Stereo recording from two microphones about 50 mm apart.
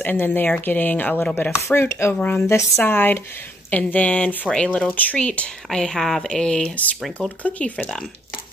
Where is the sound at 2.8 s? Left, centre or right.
Left.